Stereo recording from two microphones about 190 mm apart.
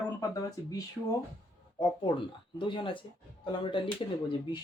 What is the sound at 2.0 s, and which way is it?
Speech, 25° left (ahead or behind).